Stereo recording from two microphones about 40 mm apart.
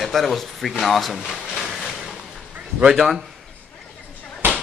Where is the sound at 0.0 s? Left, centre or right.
Centre.